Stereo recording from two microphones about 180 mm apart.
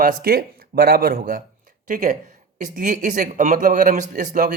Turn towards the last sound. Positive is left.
turn(degrees=-45)  # may be behind; listen again after turning